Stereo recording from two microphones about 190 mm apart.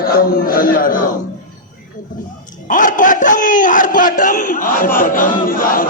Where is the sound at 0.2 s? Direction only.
50° left (ahead or behind).